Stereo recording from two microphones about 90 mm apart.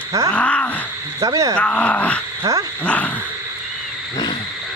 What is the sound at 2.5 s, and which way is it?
Speech, 35° right (ahead or behind).